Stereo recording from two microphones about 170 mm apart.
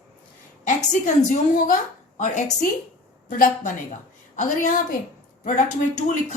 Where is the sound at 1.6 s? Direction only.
50° left (ahead or behind).